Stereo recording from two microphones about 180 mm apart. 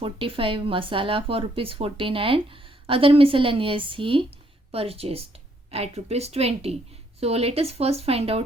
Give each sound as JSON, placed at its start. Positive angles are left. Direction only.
{"t": 0.0, "sound": "speech", "side_deg": -30}